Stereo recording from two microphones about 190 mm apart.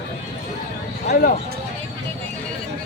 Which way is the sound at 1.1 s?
50° left (ahead or behind).